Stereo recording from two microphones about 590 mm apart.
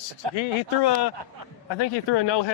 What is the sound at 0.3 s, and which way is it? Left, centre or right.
Speech, left.